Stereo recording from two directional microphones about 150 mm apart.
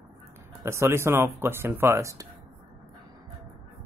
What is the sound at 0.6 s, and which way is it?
Speech, 20° right (ahead or behind).